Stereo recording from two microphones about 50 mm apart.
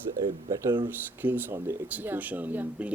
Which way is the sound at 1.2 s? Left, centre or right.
Right.